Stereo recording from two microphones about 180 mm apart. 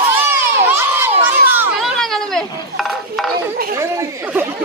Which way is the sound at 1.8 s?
Centre (ahead or behind).